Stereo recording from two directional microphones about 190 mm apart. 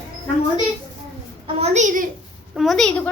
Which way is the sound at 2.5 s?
Centre (ahead or behind).